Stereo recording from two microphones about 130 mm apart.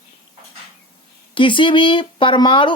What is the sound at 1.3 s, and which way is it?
Speech, 40° left (ahead or behind).